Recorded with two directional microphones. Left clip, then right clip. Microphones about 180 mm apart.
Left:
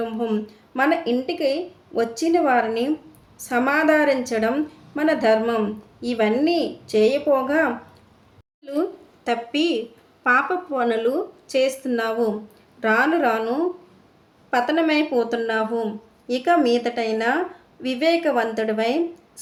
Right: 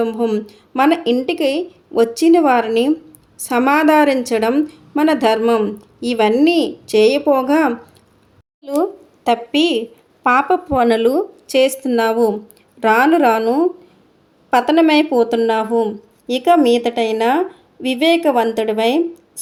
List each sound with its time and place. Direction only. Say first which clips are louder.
0.0 s a woman's voice: right 7 dB; 40° right (ahead or behind)
9.2 s a woman's voice: right 7 dB; 35° right (ahead or behind)